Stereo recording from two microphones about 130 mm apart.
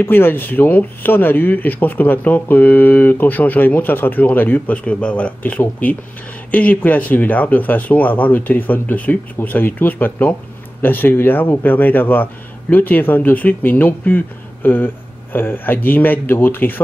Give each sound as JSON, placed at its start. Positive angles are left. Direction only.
{"t": 0.0, "sound": "speech", "side_deg": 15}